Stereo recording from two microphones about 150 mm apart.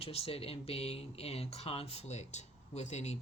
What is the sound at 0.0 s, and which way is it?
Speech, 40° left (ahead or behind).